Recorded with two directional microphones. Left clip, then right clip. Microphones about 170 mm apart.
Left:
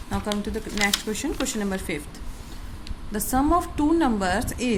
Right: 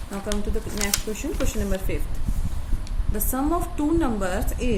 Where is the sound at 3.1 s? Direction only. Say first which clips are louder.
Left 4 dB; 35° left (ahead or behind).